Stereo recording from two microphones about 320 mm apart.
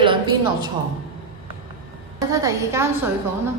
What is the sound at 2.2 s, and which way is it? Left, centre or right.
Speech, centre.